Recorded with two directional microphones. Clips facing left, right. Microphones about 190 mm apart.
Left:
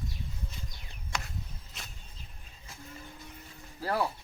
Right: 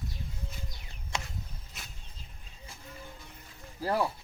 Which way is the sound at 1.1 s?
25° right (ahead or behind).